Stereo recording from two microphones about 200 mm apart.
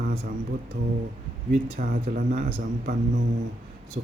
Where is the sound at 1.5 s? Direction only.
45° right (ahead or behind).